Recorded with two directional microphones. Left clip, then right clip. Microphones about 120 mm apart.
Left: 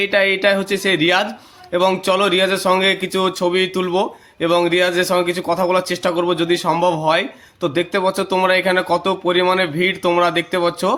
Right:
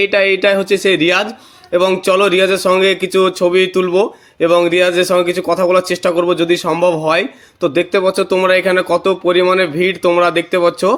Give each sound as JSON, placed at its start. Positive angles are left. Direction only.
{"t": 0.0, "sound": "speech", "side_deg": -35}